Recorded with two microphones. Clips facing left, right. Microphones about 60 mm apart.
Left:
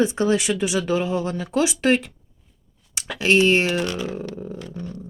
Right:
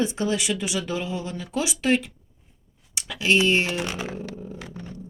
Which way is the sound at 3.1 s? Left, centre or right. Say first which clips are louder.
Left 3 dB; left.